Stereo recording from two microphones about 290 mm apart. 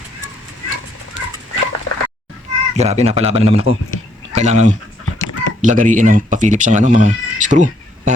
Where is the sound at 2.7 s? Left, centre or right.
Right.